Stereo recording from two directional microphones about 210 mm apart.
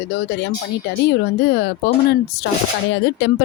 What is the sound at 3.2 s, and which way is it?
Speech, 55° left (ahead or behind).